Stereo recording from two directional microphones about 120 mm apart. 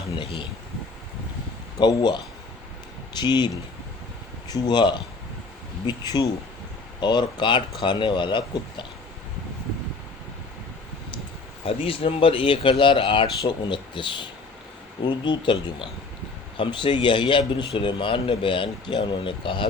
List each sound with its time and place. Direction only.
0.2 s speech: 45° left (ahead or behind)
1.8 s speech: 35° left (ahead or behind)
11.6 s speech: 50° left (ahead or behind)